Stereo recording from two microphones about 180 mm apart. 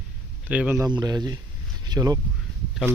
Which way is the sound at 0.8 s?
20° right (ahead or behind).